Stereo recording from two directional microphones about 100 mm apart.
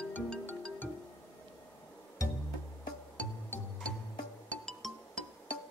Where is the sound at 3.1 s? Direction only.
10° left (ahead or behind).